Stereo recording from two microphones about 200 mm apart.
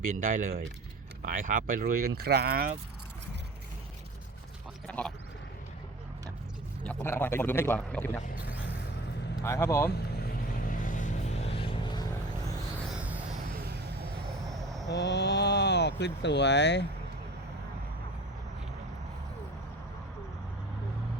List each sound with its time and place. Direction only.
0.3 s speech: 45° right (ahead or behind)
4.9 s speech: 5° left (ahead or behind)
6.8 s speech: 10° left (ahead or behind)
9.4 s speech: 15° left (ahead or behind)
10.7 s vehicle: 40° left (ahead or behind); by 12.0 s 25° left (ahead or behind)
13.0 s vehicle: 5° right (ahead or behind)
14.5 s vehicle: centre (ahead or behind)
14.9 s speech: 60° left (ahead or behind)